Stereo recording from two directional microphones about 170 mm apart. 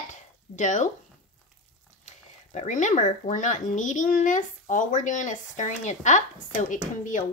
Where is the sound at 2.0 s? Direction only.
45° left (ahead or behind).